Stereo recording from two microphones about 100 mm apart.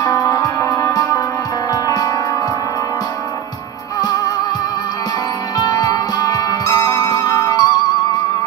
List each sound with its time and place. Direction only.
0.1 s music: 35° left (ahead or behind)
5.7 s music: 40° left (ahead or behind)